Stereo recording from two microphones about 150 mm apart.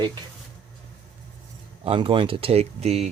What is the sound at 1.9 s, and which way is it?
Speech, 35° right (ahead or behind).